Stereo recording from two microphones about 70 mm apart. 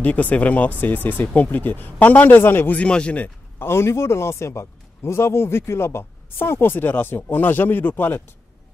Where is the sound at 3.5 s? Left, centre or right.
Left.